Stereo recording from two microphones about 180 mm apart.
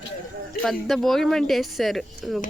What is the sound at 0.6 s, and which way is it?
A woman's voice, centre (ahead or behind).